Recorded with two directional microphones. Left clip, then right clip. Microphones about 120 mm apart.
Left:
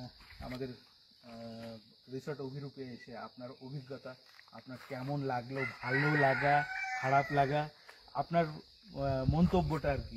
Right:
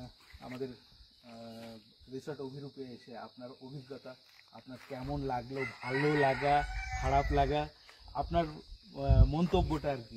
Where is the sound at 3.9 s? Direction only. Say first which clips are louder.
Left 2 dB; centre (ahead or behind).